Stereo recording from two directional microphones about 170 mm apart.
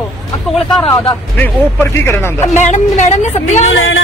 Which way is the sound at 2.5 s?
45° left (ahead or behind).